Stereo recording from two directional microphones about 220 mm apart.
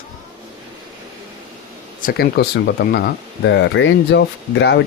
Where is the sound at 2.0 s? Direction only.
45° left (ahead or behind).